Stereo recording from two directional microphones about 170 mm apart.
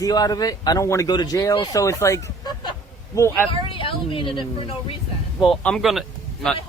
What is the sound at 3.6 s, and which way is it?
Speech, 30° left (ahead or behind).